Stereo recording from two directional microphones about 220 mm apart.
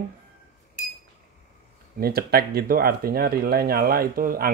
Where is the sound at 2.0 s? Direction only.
45° right (ahead or behind).